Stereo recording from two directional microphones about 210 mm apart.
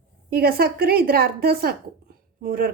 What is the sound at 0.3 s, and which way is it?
A woman's voice, 45° right (ahead or behind).